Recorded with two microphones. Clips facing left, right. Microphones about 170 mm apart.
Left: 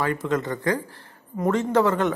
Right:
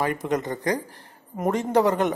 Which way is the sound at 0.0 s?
15° right (ahead or behind).